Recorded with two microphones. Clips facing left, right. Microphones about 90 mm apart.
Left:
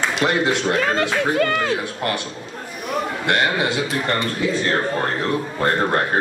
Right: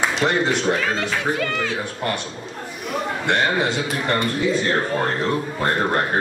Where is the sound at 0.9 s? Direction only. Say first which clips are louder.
Left 4 dB; 50° left (ahead or behind).